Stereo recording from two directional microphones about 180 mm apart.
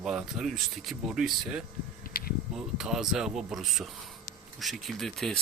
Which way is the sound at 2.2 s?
55° left (ahead or behind).